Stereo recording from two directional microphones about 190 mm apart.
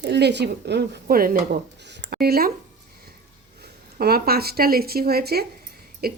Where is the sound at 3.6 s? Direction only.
55° right (ahead or behind).